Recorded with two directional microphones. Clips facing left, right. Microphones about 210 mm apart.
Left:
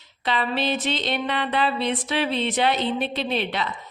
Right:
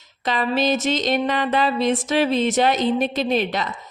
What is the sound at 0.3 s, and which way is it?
A woman's voice, 45° right (ahead or behind).